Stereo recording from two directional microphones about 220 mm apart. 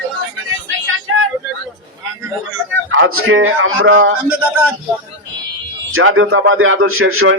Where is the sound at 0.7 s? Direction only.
65° right (ahead or behind).